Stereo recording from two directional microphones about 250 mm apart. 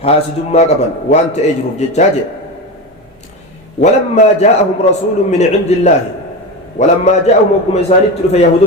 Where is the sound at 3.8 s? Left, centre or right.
Left.